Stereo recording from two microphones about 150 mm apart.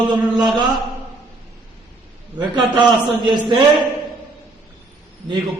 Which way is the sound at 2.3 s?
30° right (ahead or behind).